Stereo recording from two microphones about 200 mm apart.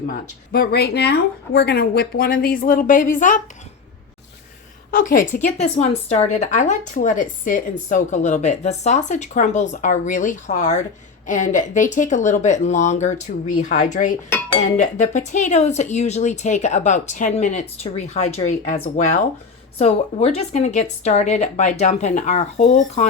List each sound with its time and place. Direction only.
0.1 s speech: 50° left (ahead or behind)
4.9 s a woman's voice: 45° left (ahead or behind)